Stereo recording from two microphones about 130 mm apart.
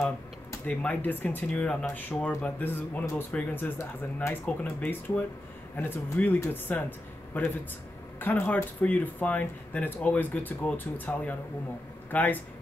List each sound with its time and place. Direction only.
0.7 s speech: 10° left (ahead or behind)